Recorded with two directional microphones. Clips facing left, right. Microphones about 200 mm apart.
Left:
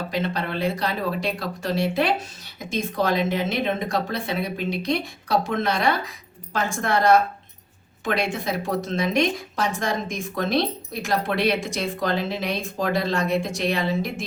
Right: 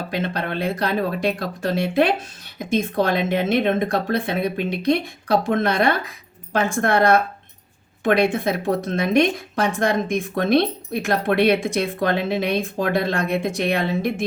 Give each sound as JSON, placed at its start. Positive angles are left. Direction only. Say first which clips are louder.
{"t": 0.1, "sound": "a woman's voice", "louder": "right 2 dB", "side_deg": -55}